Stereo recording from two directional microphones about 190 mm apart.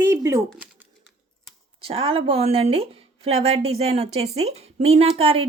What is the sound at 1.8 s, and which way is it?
Speech, 30° right (ahead or behind).